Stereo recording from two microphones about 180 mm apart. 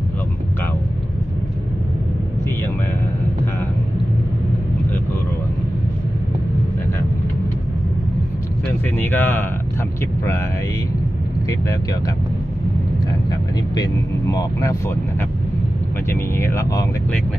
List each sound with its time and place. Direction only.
8.9 s a sound: 10° left (ahead or behind)
13.3 s speech: 20° left (ahead or behind)
16.1 s speech: 15° left (ahead or behind)